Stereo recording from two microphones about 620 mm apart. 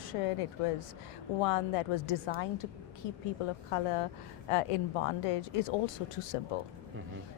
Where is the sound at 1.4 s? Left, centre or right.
Left.